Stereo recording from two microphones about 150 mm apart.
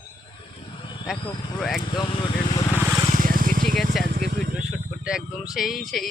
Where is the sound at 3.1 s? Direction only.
65° right (ahead or behind).